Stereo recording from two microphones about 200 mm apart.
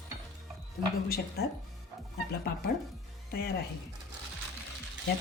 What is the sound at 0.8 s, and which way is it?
Speech, 55° left (ahead or behind).